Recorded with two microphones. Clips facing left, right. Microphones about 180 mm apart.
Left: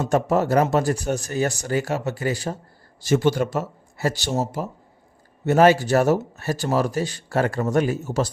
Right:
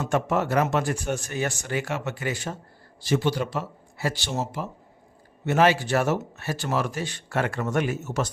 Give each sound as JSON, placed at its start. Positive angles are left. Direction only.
{"t": 0.0, "sound": "speech", "side_deg": 35}
{"t": 3.0, "sound": "speech", "side_deg": 45}